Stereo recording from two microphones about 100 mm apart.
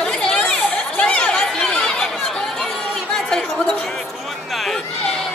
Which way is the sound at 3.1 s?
5° left (ahead or behind).